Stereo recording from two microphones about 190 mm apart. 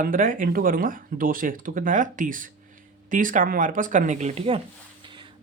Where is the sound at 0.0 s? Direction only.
45° right (ahead or behind).